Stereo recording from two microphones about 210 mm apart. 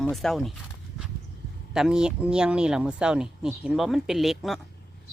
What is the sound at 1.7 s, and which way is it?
Speech, 5° right (ahead or behind).